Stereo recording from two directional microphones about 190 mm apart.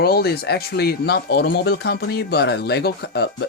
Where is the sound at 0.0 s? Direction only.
55° left (ahead or behind).